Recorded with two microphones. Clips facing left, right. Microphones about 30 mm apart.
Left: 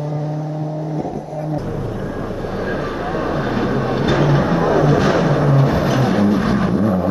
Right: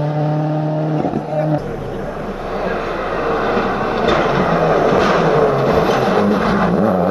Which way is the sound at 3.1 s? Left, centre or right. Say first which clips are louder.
Right 4 dB; right.